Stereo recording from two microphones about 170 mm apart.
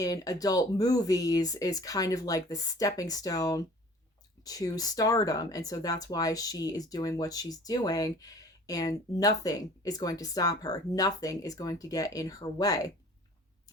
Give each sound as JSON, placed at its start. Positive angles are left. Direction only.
{"t": 0.0, "sound": "speech", "side_deg": 20}